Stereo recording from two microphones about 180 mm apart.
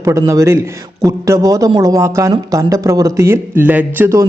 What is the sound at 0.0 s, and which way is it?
A man's voice, 20° right (ahead or behind).